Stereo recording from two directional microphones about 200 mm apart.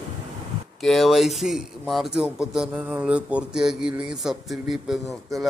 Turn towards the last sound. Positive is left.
turn(degrees=0)  # may be behind; listen again after turning